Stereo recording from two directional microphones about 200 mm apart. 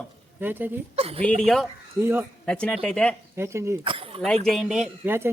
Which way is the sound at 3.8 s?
25° right (ahead or behind).